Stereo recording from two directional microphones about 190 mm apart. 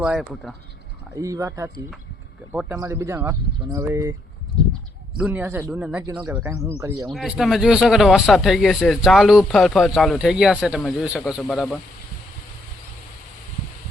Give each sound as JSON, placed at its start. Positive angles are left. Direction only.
{"t": 0.0, "sound": "a man's voice", "side_deg": -5}
{"t": 1.1, "sound": "speech", "side_deg": -15}
{"t": 5.1, "sound": "speech", "side_deg": -10}
{"t": 7.1, "sound": "a man's voice", "side_deg": 0}